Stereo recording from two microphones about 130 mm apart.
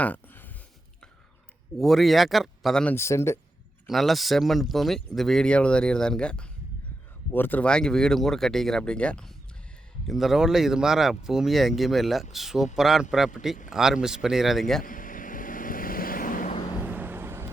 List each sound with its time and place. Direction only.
1.8 s speech: centre (ahead or behind)
2.9 s speech: 20° left (ahead or behind)
3.8 s speech: centre (ahead or behind)
14.8 s vehicle: 90° left
16.8 s vehicle: 15° right (ahead or behind)